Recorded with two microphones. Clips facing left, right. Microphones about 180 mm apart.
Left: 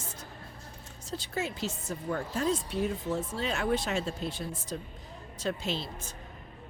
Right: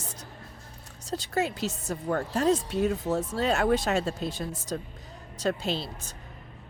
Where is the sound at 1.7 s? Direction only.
70° right (ahead or behind).